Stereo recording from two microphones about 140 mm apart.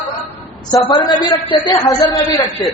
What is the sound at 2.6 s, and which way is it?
Speech, 30° left (ahead or behind).